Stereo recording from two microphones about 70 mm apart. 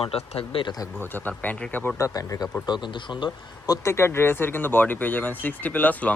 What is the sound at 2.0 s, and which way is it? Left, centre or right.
Speech, left.